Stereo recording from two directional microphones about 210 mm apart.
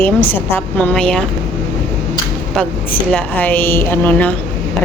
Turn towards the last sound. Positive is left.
turn(degrees=5)  # may be behind; listen again after turning